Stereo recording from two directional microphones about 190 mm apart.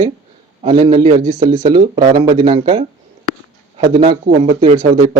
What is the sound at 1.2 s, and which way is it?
Speech, 45° right (ahead or behind).